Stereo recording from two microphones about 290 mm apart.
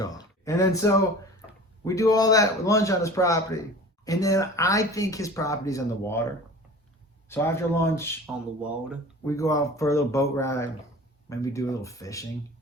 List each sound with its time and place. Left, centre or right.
0.0 s a sound: centre
1.8 s a man's voice: centre
8.6 s speech: centre
9.2 s a man's voice: centre